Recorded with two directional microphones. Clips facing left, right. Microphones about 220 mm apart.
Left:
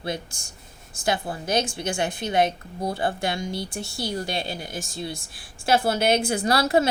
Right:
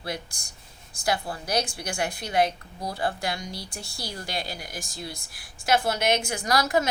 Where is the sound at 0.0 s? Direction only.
25° left (ahead or behind).